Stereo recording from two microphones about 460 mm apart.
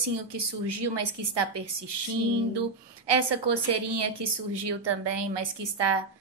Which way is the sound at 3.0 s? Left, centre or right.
Right.